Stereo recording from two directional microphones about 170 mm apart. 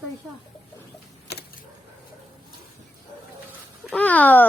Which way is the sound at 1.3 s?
75° left (ahead or behind).